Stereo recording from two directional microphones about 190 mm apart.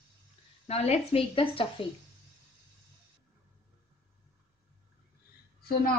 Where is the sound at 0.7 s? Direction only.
35° left (ahead or behind).